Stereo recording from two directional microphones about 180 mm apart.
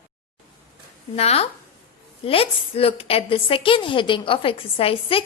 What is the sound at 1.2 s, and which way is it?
A woman's voice, 35° left (ahead or behind).